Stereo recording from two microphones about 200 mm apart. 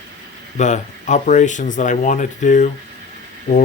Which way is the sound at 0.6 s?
35° left (ahead or behind).